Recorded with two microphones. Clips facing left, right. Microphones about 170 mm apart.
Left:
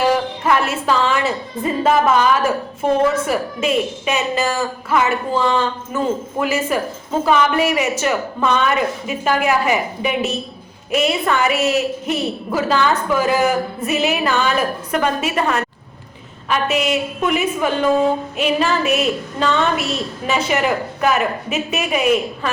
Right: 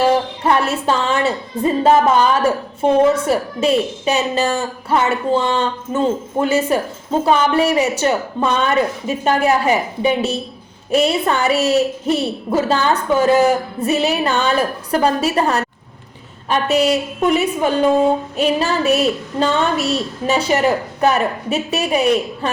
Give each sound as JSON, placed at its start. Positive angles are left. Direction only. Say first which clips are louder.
{"t": 0.0, "sound": "music", "louder": "right 2 dB", "side_deg": -30}
{"t": 0.7, "sound": "a woman's voice", "louder": "even", "side_deg": -30}